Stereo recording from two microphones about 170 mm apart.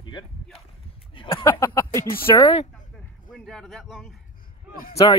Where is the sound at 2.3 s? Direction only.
30° left (ahead or behind).